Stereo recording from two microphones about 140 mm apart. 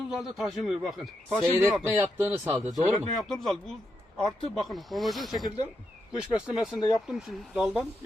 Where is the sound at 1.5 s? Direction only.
25° right (ahead or behind).